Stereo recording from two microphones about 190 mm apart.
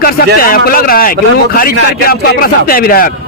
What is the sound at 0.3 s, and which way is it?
Speech, 50° left (ahead or behind).